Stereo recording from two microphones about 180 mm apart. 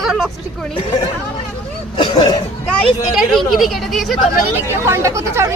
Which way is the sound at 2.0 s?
25° left (ahead or behind).